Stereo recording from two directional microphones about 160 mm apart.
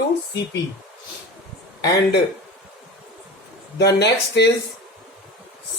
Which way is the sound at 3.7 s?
90° left.